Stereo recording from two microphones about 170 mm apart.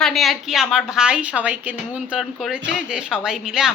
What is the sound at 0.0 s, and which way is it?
A woman's voice, centre (ahead or behind).